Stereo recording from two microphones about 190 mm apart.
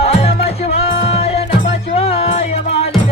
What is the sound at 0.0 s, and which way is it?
Music, 30° left (ahead or behind).